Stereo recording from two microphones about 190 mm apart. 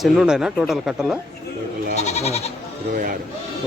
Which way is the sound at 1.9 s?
35° left (ahead or behind).